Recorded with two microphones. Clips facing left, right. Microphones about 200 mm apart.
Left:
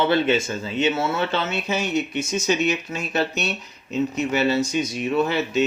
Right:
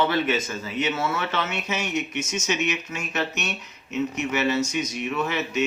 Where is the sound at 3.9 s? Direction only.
30° left (ahead or behind).